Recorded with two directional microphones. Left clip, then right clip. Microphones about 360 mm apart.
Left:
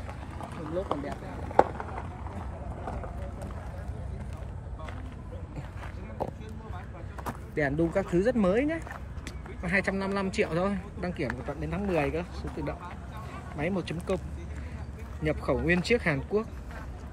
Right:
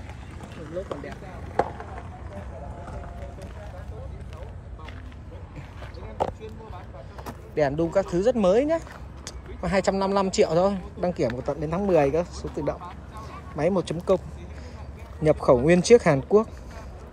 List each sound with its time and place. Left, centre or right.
0.8 s speech: centre
7.5 s speech: centre
15.2 s speech: centre